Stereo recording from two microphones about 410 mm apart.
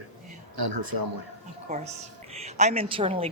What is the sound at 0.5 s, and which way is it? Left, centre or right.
Speech, right.